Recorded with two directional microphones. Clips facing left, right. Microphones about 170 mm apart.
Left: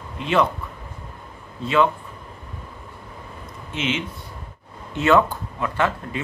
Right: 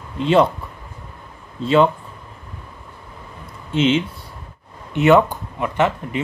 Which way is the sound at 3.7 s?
30° right (ahead or behind).